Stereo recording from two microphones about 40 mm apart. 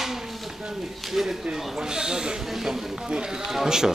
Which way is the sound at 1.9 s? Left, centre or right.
Centre.